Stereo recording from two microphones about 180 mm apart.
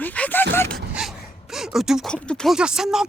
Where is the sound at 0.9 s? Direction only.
Centre (ahead or behind).